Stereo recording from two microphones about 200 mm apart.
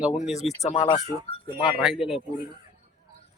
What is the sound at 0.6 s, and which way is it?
Speech, 30° left (ahead or behind).